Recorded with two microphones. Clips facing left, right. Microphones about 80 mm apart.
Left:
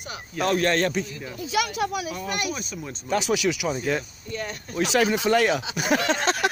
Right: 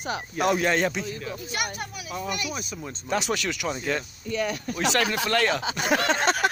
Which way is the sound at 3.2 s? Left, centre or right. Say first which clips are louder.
Left 5 dB; centre.